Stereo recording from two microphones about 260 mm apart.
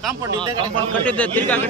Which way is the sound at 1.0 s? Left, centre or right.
Centre.